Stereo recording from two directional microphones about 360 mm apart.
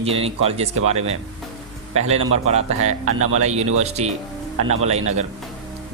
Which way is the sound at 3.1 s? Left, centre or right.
Right.